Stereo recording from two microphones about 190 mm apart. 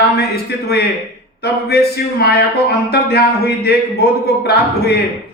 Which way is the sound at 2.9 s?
55° left (ahead or behind).